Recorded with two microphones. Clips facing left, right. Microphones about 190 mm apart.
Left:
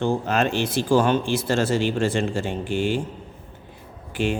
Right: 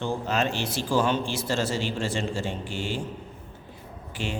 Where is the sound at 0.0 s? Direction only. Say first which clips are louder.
Left 5 dB; 55° left (ahead or behind).